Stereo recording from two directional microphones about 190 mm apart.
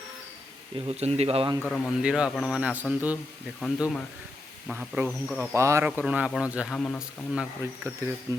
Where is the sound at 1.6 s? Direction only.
5° left (ahead or behind).